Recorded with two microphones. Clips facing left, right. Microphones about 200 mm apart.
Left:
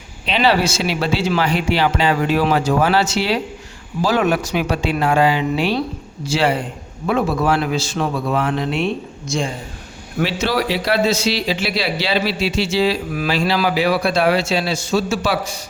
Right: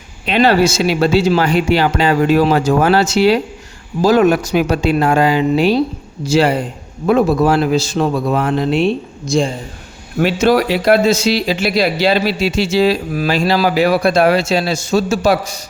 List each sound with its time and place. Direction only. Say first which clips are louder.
0.3 s speech: right 5 dB; 50° right (ahead or behind); by 9.5 s 35° right (ahead or behind)
10.2 s speech: right 7 dB; 50° right (ahead or behind)